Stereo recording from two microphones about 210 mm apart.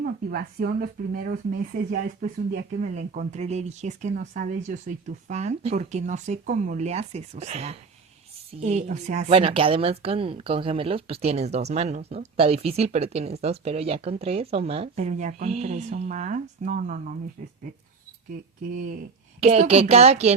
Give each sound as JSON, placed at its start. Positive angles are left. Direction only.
{"t": 0.0, "sound": "a woman's voice", "side_deg": -45}
{"t": 19.4, "sound": "speech", "side_deg": -30}